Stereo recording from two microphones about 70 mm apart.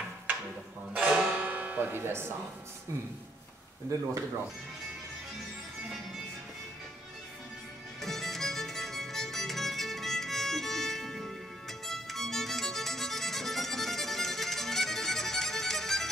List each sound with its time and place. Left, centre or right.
0.9 s music: centre; by 2.2 s right
8.0 s music: centre